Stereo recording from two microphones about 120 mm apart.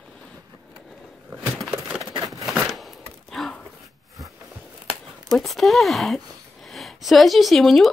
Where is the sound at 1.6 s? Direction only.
5° right (ahead or behind).